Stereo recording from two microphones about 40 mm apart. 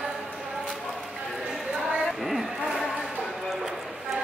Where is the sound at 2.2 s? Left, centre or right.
Centre.